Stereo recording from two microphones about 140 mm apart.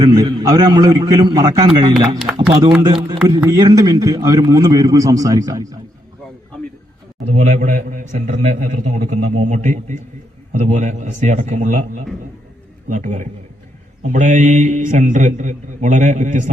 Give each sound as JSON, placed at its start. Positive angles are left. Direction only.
{"t": 0.0, "sound": "a man's voice", "side_deg": -30}
{"t": 2.1, "sound": "speech", "side_deg": -5}
{"t": 2.5, "sound": "a man's voice", "side_deg": -45}
{"t": 2.8, "sound": "a man's voice", "side_deg": -30}
{"t": 7.3, "sound": "a man's voice", "side_deg": -60}